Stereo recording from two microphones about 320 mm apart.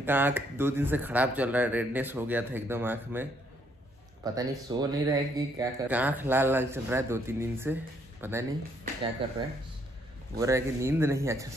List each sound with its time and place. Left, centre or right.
0.0 s speech: centre
9.2 s speech: centre